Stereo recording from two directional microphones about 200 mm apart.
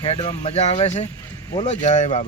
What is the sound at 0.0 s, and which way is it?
Speech, 30° left (ahead or behind).